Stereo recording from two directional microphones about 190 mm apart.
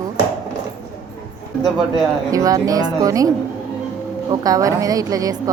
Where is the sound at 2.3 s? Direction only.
20° right (ahead or behind).